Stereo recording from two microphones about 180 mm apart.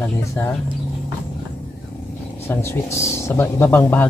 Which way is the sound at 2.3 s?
15° left (ahead or behind).